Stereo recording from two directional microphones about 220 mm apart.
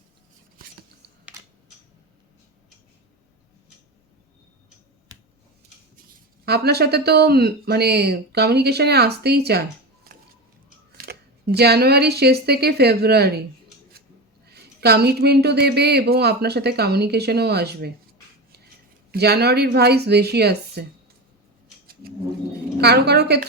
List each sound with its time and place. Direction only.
6.1 s speech: 45° right (ahead or behind)
14.4 s speech: 45° right (ahead or behind)
19.1 s speech: 45° right (ahead or behind)
22.8 s speech: 50° right (ahead or behind)